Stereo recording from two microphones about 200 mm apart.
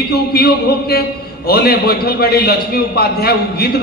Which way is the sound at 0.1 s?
50° left (ahead or behind).